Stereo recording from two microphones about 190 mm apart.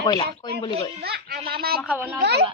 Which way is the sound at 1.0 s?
55° right (ahead or behind).